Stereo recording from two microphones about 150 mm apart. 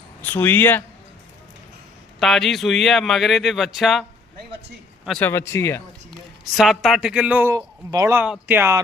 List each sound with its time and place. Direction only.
0.2 s speech: 15° left (ahead or behind)
2.1 s speech: centre (ahead or behind)
5.2 s speech: 15° left (ahead or behind)
6.4 s speech: centre (ahead or behind)